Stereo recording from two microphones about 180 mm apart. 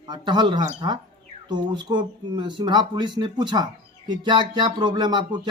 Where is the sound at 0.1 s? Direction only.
25° right (ahead or behind).